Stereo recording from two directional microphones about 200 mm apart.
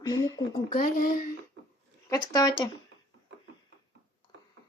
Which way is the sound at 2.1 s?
20° left (ahead or behind).